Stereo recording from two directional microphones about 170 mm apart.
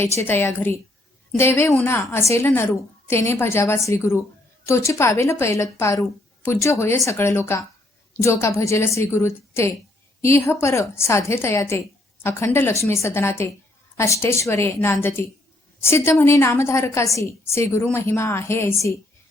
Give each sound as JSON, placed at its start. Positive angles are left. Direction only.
{"t": 0.3, "sound": "a woman's voice", "side_deg": 15}